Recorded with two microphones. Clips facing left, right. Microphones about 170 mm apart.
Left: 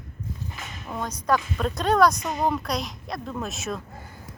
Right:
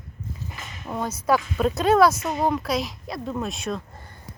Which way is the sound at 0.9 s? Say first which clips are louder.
Right 2 dB; 5° right (ahead or behind).